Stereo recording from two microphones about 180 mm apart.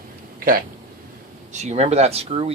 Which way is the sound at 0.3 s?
50° right (ahead or behind).